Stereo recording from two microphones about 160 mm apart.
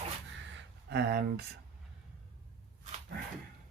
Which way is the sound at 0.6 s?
90° right.